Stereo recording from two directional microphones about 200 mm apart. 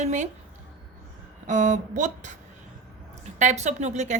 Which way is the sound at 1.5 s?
35° right (ahead or behind).